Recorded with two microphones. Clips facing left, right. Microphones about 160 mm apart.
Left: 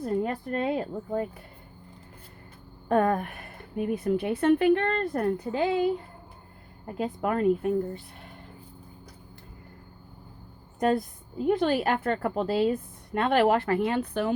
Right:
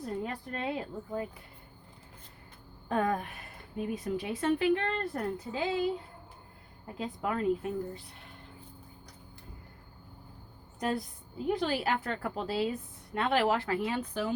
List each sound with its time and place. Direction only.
0.0 s a woman's voice: 55° left (ahead or behind)
2.9 s a woman's voice: 55° left (ahead or behind)
10.8 s a woman's voice: 50° left (ahead or behind)